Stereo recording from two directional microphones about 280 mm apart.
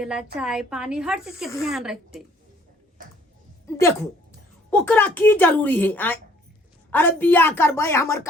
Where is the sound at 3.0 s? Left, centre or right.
Right.